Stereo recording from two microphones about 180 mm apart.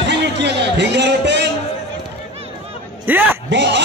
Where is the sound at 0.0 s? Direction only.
75° right (ahead or behind).